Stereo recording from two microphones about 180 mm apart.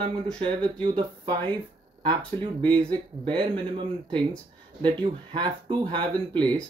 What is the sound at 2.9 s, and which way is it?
Speech, 25° right (ahead or behind).